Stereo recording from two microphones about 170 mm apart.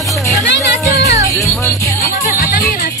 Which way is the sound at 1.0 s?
20° right (ahead or behind).